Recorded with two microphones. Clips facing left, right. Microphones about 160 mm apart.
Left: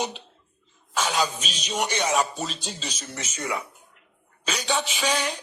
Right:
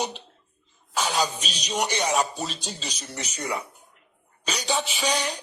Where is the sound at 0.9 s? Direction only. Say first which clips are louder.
Even; 35° right (ahead or behind).